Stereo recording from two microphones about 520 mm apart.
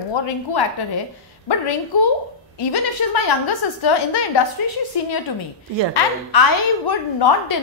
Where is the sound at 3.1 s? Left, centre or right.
Left.